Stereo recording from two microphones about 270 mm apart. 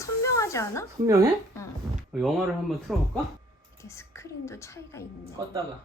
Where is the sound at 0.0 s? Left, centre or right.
Centre.